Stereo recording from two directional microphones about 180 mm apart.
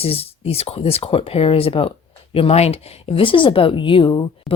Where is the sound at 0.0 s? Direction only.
35° left (ahead or behind).